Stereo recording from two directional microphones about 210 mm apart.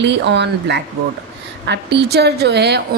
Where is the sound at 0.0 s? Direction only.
55° right (ahead or behind).